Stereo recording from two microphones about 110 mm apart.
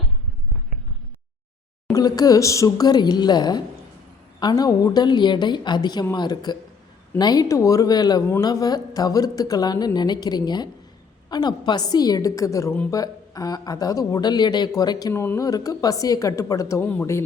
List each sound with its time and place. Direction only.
1.9 s a woman's voice: 35° left (ahead or behind)
15.1 s speech: 20° left (ahead or behind)